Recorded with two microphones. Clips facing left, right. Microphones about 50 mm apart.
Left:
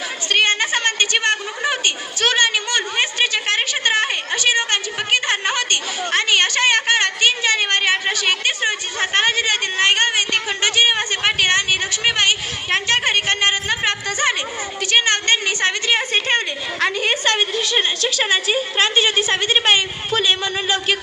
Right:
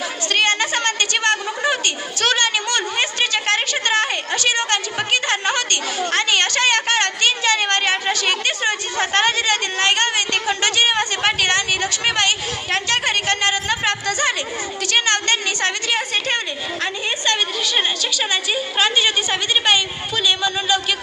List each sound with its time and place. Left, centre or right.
0.3 s a sound: centre
12.7 s a woman's voice: left
15.9 s a woman's voice: left
19.5 s a woman's voice: left